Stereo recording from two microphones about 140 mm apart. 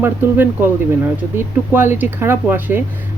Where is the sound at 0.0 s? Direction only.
15° right (ahead or behind).